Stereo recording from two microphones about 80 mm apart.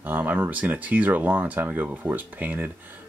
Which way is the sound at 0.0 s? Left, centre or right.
Right.